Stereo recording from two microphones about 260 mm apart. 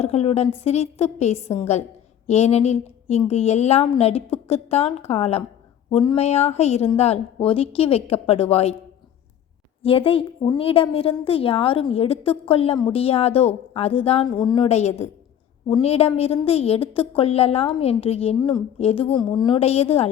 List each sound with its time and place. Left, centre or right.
0.0 s a woman's voice: left
9.8 s a woman's voice: left